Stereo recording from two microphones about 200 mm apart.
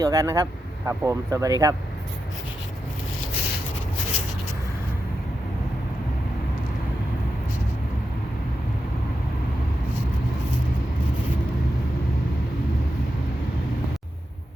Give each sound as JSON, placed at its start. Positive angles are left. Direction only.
{"t": 0.0, "sound": "speech", "side_deg": -15}